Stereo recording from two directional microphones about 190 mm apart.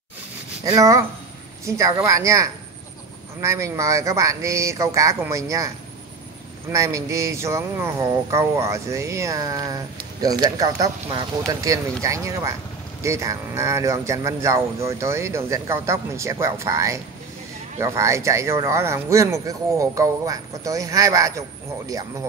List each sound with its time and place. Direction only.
0.7 s speech: 15° right (ahead or behind)
6.7 s speech: 15° right (ahead or behind)